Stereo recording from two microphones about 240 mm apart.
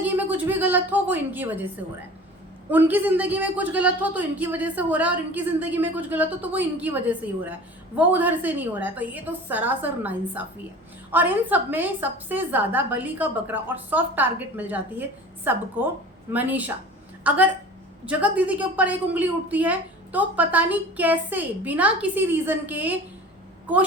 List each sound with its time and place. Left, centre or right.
0.0 s a woman's voice: centre